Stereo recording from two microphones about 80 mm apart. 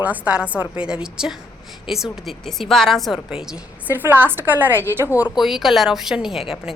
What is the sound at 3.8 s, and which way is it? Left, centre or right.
A woman's voice, right.